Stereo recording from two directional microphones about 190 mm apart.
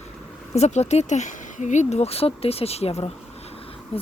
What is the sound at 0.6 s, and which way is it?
Speech, 35° left (ahead or behind).